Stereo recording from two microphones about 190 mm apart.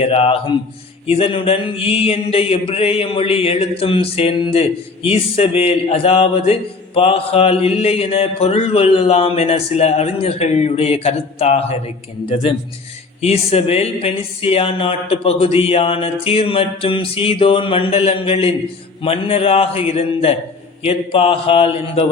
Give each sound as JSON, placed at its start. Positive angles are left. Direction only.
{"t": 0.0, "sound": "a man's voice", "side_deg": 35}
{"t": 12.3, "sound": "mantra", "side_deg": 25}
{"t": 13.2, "sound": "a man's voice", "side_deg": 35}
{"t": 20.8, "sound": "mantra", "side_deg": 30}